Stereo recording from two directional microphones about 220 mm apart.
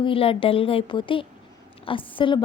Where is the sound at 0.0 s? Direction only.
25° left (ahead or behind).